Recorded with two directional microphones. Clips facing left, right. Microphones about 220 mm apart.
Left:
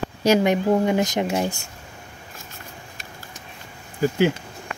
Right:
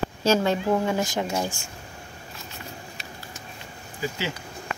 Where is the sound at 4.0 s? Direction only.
55° left (ahead or behind).